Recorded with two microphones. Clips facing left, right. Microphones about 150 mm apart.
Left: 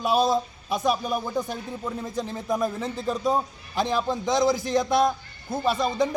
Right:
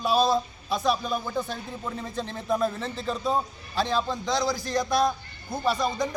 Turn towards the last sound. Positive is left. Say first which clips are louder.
# left 2 dB
turn(degrees=25)  # may be behind; listen again after turning